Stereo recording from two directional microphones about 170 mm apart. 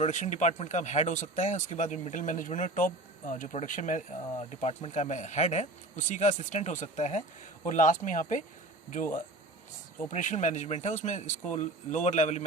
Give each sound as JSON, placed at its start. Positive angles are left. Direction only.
{"t": 0.0, "sound": "speech", "side_deg": 45}
{"t": 10.1, "sound": "speech", "side_deg": 45}